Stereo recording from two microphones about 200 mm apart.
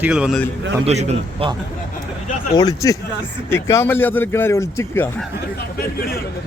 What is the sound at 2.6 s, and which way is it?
A man's voice, 20° left (ahead or behind).